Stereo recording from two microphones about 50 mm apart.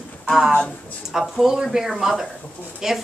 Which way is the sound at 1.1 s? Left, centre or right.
Centre.